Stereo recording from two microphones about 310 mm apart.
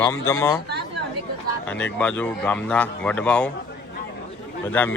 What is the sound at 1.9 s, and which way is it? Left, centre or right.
Speech, centre.